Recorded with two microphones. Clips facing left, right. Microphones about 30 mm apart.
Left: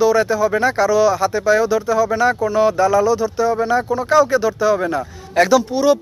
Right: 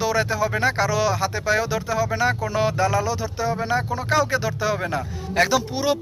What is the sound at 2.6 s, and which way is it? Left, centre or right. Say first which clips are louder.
Speech: left 7 dB; right.